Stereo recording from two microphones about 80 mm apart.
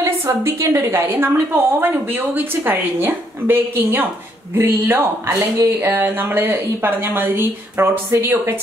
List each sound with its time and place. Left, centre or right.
0.4 s a woman's voice: right